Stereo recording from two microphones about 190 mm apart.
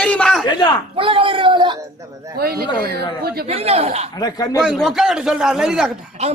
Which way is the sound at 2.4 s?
55° right (ahead or behind).